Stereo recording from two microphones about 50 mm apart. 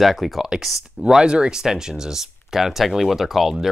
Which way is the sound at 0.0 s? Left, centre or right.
Centre.